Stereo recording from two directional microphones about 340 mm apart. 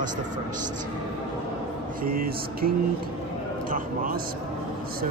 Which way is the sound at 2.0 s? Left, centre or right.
Right.